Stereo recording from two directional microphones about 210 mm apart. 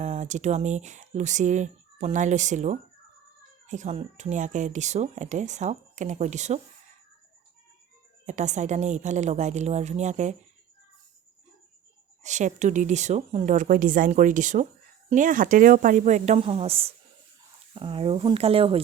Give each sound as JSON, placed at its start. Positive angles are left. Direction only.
{"t": 0.0, "sound": "speech", "side_deg": -35}
{"t": 8.3, "sound": "speech", "side_deg": -35}
{"t": 12.2, "sound": "speech", "side_deg": -35}